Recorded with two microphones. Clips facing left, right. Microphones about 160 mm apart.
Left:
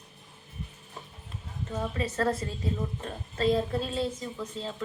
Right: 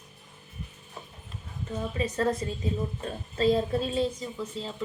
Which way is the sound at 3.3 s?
25° right (ahead or behind).